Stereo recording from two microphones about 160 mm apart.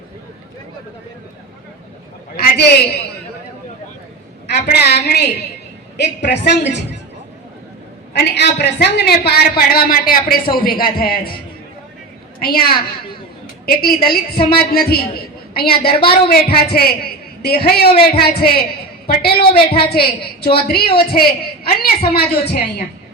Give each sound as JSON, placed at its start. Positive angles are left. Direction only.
{"t": 2.3, "sound": "a sound", "side_deg": 75}
{"t": 4.4, "sound": "a woman's voice", "side_deg": 90}
{"t": 8.1, "sound": "a man's voice", "side_deg": 90}
{"t": 12.4, "sound": "a woman's voice", "side_deg": 70}